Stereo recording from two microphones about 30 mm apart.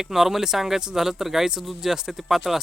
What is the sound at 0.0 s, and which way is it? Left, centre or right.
Speech, centre.